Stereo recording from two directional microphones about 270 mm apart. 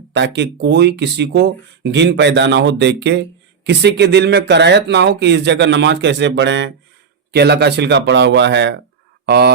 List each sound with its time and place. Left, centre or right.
0.1 s speech: right